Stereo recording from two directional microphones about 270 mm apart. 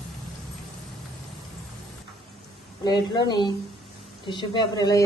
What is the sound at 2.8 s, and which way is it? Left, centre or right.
Speech, centre.